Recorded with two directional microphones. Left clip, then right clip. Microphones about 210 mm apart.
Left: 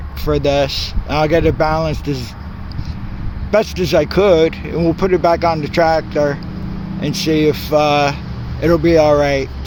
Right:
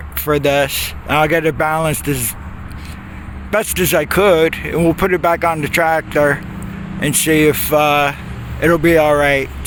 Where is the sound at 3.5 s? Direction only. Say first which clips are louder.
Left 1 dB; 5° right (ahead or behind).